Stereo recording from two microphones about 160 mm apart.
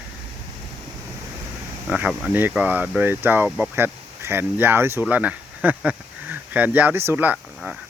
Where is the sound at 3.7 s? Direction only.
15° right (ahead or behind).